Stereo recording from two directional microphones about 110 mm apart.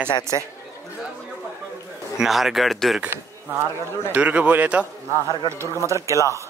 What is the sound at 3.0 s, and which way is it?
Speech, 20° right (ahead or behind).